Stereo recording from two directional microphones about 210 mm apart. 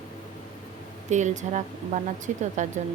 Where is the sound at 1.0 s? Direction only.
35° right (ahead or behind).